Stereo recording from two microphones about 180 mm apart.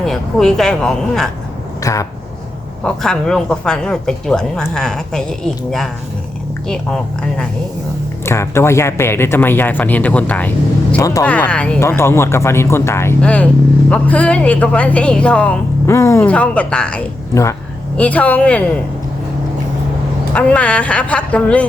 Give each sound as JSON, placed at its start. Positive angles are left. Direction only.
{"t": 0.0, "sound": "speech", "side_deg": 0}
{"t": 1.8, "sound": "speech", "side_deg": 20}
{"t": 2.8, "sound": "speech", "side_deg": 5}
{"t": 6.7, "sound": "speech", "side_deg": 5}
{"t": 8.2, "sound": "speech", "side_deg": 15}
{"t": 20.3, "sound": "speech", "side_deg": 5}